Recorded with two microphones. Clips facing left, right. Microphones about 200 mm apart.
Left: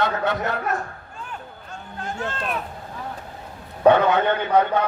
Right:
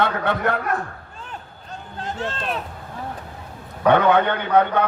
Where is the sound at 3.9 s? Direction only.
55° right (ahead or behind).